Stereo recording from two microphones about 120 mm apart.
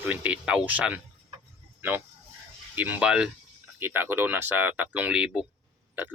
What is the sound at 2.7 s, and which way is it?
Speech, 15° right (ahead or behind).